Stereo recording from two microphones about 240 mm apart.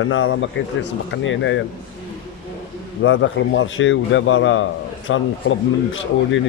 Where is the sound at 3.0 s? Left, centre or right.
Left.